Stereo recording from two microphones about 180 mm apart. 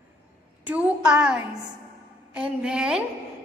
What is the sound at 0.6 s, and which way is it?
A woman's voice, 10° right (ahead or behind).